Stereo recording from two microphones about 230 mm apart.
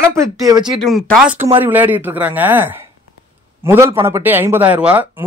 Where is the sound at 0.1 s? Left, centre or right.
Centre.